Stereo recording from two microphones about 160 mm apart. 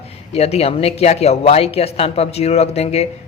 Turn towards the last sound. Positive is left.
turn(degrees=40)  # may be behind; listen again after turning